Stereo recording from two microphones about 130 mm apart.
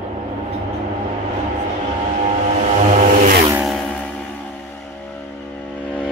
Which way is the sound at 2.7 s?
75° right (ahead or behind).